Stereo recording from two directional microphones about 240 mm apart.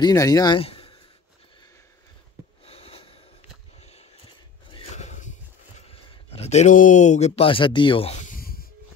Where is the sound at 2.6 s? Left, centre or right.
Left.